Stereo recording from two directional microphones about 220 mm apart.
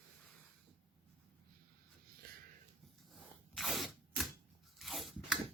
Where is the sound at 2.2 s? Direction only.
45° right (ahead or behind).